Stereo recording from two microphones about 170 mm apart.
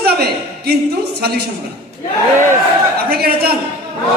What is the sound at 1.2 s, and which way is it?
Speech, 70° right (ahead or behind).